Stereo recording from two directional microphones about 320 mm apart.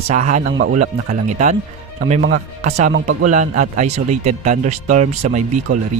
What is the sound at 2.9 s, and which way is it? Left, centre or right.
A man's voice, right.